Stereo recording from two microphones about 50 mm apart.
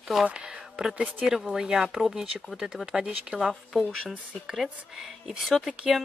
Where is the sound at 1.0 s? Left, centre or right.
Centre.